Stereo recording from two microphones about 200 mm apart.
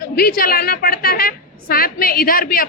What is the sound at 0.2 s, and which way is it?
A woman's voice, 50° left (ahead or behind).